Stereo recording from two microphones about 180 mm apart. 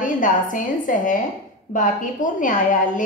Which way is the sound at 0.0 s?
45° left (ahead or behind).